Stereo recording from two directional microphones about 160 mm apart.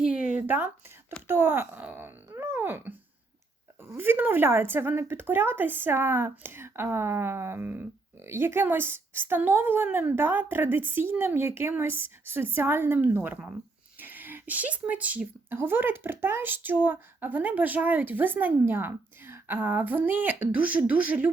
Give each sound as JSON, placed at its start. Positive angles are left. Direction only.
{"t": 0.1, "sound": "a sound", "side_deg": 55}
{"t": 0.4, "sound": "speech", "side_deg": -10}
{"t": 3.9, "sound": "speech", "side_deg": -15}